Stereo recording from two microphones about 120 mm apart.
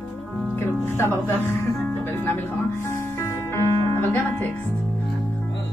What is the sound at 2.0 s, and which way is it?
Music, 20° left (ahead or behind).